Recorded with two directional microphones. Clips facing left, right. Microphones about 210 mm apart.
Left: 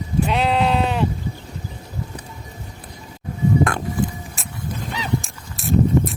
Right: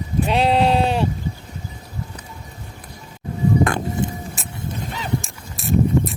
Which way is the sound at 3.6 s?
Centre (ahead or behind).